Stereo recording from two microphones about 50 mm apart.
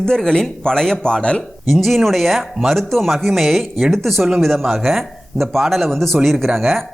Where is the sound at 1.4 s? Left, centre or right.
Centre.